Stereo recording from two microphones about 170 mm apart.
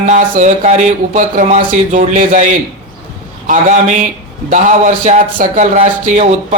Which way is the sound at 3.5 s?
45° right (ahead or behind).